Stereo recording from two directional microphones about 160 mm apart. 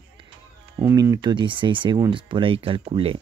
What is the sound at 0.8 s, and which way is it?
Speech, 20° right (ahead or behind).